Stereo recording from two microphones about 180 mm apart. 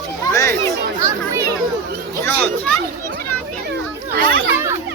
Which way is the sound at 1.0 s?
15° right (ahead or behind).